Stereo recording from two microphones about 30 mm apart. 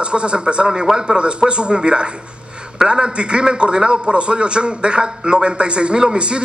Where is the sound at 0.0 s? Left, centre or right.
Right.